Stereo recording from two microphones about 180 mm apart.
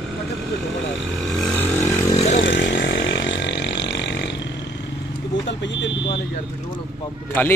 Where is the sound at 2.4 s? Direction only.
85° left.